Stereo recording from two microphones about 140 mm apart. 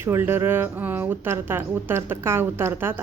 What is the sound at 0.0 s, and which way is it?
Speech, 15° right (ahead or behind).